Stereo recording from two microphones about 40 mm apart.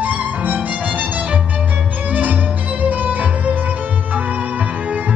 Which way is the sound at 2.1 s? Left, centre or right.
Right.